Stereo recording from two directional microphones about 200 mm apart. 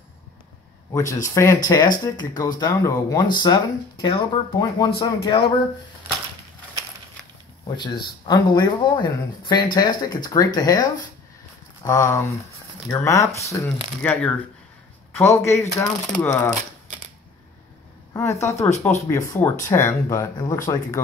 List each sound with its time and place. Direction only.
0.9 s speech: 15° left (ahead or behind)
7.6 s speech: 20° left (ahead or behind)
18.1 s speech: 15° left (ahead or behind)